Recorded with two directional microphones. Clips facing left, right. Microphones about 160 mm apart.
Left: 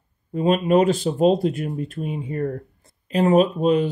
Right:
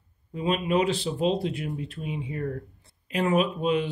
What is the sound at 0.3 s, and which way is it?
Speech, 45° left (ahead or behind).